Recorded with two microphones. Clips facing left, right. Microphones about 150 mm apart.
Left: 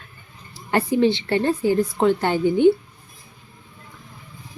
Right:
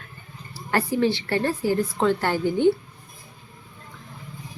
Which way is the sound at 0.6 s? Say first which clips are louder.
Left 3 dB; 20° left (ahead or behind).